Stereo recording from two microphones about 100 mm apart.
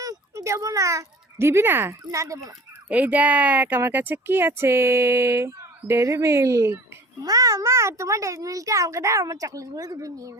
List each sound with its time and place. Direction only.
0.0 s a child's voice: 35° right (ahead or behind)
2.9 s a child's voice: 15° right (ahead or behind); by 10.3 s 35° right (ahead or behind)